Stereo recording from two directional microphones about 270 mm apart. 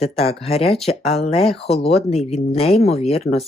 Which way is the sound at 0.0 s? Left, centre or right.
Left.